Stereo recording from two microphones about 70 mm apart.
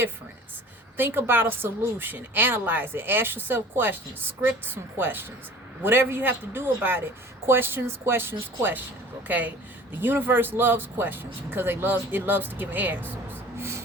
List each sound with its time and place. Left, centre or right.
0.9 s a woman's voice: right
13.6 s music: right